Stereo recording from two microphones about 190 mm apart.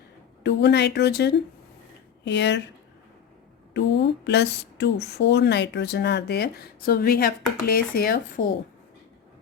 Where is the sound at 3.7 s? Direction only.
65° left (ahead or behind); by 8.4 s 50° left (ahead or behind).